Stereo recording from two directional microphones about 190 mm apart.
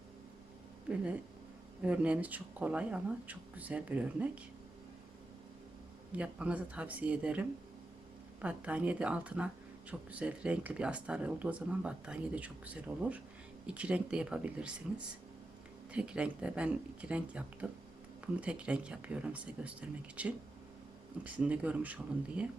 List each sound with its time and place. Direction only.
0.9 s speech: 5° right (ahead or behind)
6.1 s speech: 5° right (ahead or behind)